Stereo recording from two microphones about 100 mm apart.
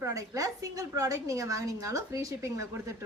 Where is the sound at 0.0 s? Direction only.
35° right (ahead or behind).